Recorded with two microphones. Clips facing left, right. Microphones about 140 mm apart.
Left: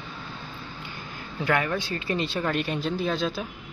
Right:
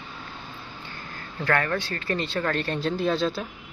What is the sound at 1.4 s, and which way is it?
Speech, 15° left (ahead or behind).